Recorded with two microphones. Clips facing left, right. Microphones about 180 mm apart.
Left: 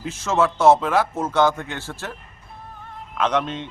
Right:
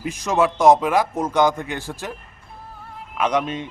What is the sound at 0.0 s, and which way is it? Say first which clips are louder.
Speech: right 1 dB; 15° right (ahead or behind).